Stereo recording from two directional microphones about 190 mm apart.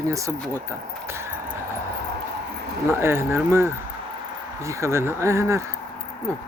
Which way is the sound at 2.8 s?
15° right (ahead or behind).